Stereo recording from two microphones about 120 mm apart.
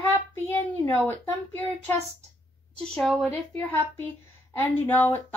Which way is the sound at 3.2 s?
15° left (ahead or behind).